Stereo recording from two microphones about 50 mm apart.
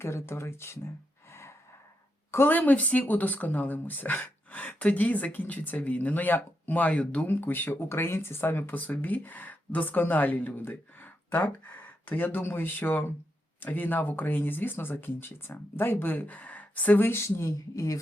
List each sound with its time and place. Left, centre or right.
0.0 s speech: left
1.3 s gasp: left
2.5 s speech: left
7.3 s speech: left
7.8 s speech: left
8.8 s speech: left
17.1 s speech: left